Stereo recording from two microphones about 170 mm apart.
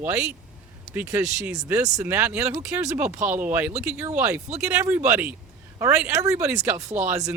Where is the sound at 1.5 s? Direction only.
20° right (ahead or behind).